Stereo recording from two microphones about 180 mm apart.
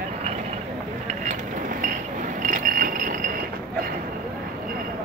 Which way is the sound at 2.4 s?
50° right (ahead or behind).